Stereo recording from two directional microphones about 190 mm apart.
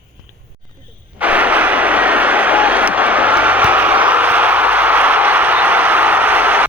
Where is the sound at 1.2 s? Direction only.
5° right (ahead or behind).